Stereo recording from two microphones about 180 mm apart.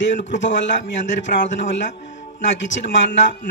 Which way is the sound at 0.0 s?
90° left.